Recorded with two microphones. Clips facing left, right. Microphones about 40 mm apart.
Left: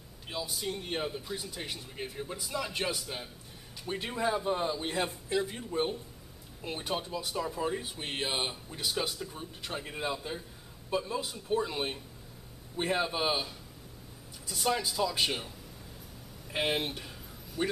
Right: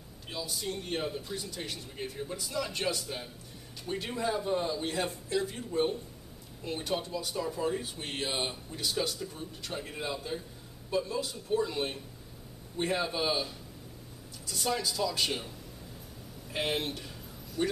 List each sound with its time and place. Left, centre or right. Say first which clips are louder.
0.3 s speech: left 1 dB; centre
14.5 s speech: left 1 dB; centre
16.5 s speech: left 1 dB; centre